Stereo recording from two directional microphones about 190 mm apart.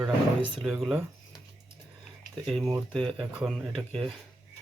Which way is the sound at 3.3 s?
Centre (ahead or behind).